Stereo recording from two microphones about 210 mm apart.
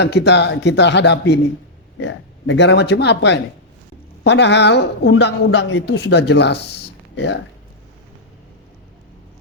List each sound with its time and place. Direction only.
0.0 s a woman's voice: 55° left (ahead or behind)